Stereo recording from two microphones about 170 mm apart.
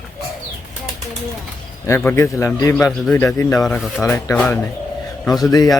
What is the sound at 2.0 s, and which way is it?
A man's voice, 15° left (ahead or behind).